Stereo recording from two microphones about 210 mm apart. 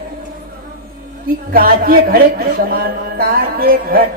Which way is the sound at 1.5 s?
45° right (ahead or behind).